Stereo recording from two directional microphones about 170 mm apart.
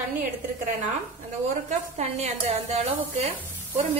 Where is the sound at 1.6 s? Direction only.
40° right (ahead or behind).